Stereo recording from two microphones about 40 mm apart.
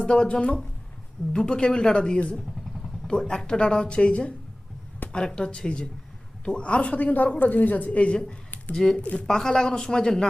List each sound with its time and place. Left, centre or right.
0.0 s speech: left
6.9 s a woman's voice: left
8.7 s speech: centre
9.0 s speech: left
9.2 s speech: centre